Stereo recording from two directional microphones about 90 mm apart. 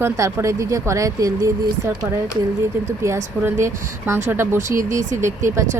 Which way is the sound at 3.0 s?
30° right (ahead or behind).